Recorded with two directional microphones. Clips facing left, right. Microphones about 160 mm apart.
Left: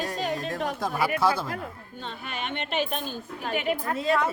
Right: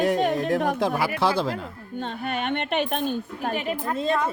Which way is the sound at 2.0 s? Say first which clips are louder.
Right 7 dB; 50° right (ahead or behind).